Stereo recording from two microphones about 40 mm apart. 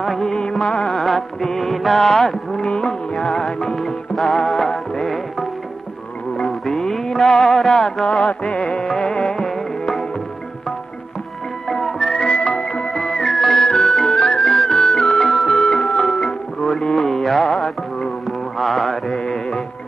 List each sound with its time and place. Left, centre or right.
0.0 s music: centre
0.3 s music: left
6.4 s music: centre
8.5 s music: left
8.8 s music: centre
11.7 s whistling: centre
12.3 s music: centre
18.6 s mantra: centre